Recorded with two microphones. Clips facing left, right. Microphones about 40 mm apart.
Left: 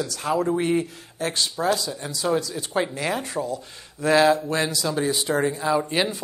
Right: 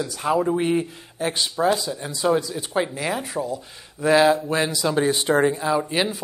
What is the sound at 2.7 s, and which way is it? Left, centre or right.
Speech, centre.